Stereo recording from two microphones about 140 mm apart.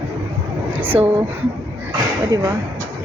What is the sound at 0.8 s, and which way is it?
Speech, 10° right (ahead or behind).